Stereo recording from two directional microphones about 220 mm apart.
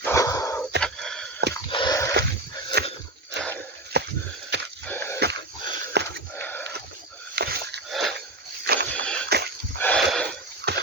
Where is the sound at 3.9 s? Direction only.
50° right (ahead or behind).